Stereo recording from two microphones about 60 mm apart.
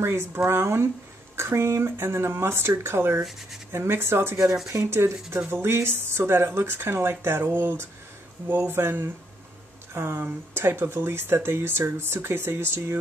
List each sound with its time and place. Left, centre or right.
0.0 s speech: right
1.8 s speech: right
8.7 s speech: right